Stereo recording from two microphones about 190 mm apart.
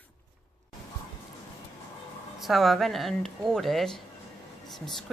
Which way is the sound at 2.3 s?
Centre (ahead or behind).